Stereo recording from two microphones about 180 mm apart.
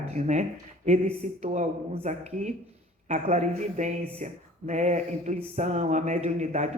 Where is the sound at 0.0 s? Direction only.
40° right (ahead or behind).